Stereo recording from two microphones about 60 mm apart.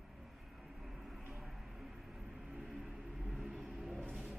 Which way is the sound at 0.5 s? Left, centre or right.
Centre.